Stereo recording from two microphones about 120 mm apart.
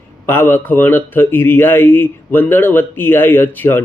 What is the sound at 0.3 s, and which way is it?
Speech, 20° left (ahead or behind).